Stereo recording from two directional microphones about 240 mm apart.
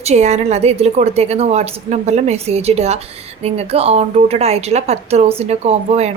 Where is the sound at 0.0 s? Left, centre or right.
Right.